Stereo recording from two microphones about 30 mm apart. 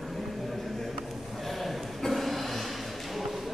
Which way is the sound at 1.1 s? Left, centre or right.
Centre.